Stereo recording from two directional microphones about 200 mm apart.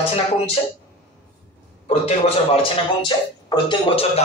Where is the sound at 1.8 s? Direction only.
30° left (ahead or behind).